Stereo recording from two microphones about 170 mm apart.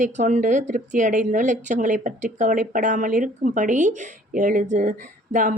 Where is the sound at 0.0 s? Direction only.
45° right (ahead or behind).